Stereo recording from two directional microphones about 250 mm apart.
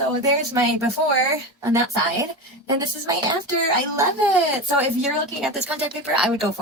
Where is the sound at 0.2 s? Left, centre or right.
Centre.